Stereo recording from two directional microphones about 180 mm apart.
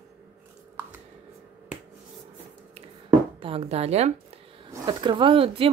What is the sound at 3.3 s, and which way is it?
Speech, 30° right (ahead or behind).